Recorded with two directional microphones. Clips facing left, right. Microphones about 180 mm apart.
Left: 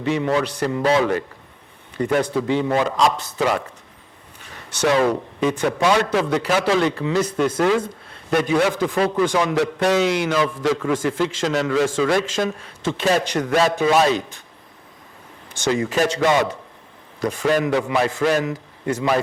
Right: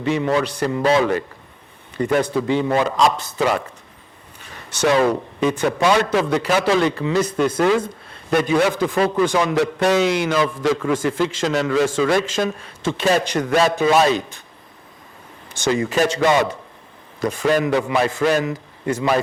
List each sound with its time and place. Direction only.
0.0 s a man's voice: 10° right (ahead or behind)
0.9 s speech: 20° right (ahead or behind)
2.2 s a man's voice: 10° right (ahead or behind)
2.8 s speech: 20° right (ahead or behind)
4.5 s a sound: 5° right (ahead or behind)
5.4 s a man's voice: 10° right (ahead or behind)
7.5 s a man's voice: 20° right (ahead or behind)
15.5 s a man's voice: 10° right (ahead or behind)